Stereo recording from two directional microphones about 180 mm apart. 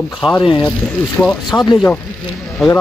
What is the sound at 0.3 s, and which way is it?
Speech, 25° left (ahead or behind).